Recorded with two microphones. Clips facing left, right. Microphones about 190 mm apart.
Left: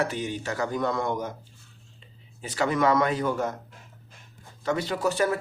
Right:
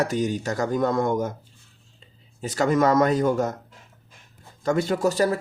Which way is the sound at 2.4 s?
45° right (ahead or behind).